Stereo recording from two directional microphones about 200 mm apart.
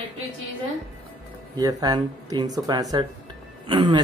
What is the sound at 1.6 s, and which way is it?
Speech, 20° right (ahead or behind).